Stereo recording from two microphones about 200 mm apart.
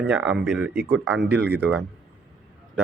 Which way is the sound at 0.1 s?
5° right (ahead or behind).